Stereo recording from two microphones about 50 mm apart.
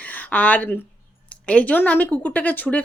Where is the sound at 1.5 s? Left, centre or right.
Left.